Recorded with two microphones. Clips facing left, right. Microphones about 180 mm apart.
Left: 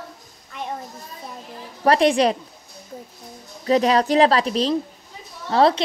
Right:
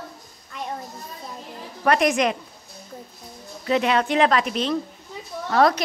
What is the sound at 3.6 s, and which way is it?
Speech, 35° left (ahead or behind).